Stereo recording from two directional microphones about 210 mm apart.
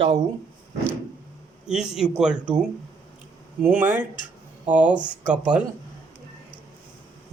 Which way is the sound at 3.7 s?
10° right (ahead or behind).